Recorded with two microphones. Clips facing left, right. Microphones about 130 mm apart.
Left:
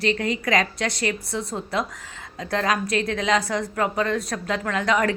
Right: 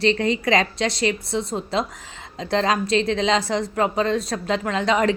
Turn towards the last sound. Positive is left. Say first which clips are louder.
# right 2 dB
turn(degrees=-20)  # may be behind; listen again after turning